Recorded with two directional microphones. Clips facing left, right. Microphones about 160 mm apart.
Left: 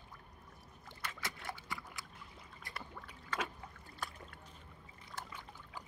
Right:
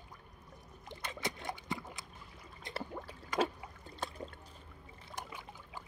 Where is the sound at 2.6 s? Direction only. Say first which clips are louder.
Right 6 dB; 20° right (ahead or behind).